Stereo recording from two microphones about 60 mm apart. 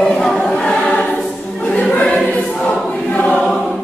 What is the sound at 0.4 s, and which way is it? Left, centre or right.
Choir, centre.